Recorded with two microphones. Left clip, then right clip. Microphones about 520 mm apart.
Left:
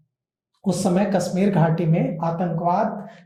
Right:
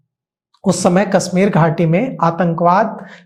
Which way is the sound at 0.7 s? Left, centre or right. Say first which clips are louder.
Right 8 dB; right.